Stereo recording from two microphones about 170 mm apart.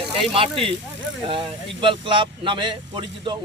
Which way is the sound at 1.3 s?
30° right (ahead or behind).